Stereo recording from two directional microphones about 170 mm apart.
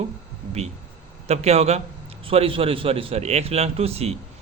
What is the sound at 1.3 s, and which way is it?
A man's voice, 40° right (ahead or behind).